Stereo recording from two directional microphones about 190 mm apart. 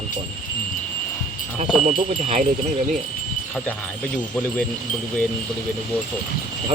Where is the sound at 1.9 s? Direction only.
35° right (ahead or behind).